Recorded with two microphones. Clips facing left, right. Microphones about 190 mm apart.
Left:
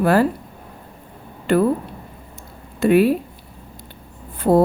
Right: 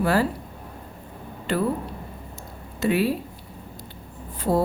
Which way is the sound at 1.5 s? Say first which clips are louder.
Left 8 dB; 55° left (ahead or behind).